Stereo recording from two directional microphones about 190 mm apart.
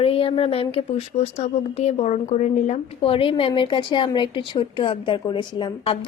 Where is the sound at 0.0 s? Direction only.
30° left (ahead or behind).